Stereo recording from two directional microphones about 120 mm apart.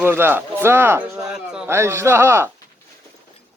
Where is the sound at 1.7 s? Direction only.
20° right (ahead or behind).